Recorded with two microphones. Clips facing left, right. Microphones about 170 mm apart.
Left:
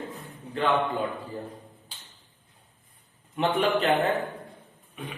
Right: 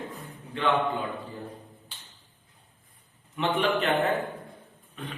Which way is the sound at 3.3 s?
35° left (ahead or behind).